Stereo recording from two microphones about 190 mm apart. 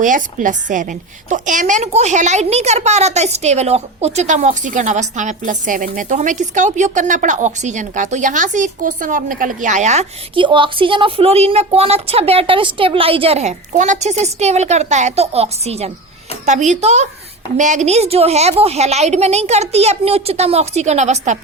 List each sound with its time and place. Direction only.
0.0 s a woman's voice: 45° right (ahead or behind)